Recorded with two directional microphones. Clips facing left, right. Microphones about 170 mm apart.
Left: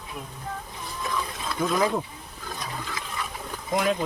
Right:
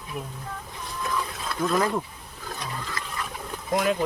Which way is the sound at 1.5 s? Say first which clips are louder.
Even; 5° left (ahead or behind).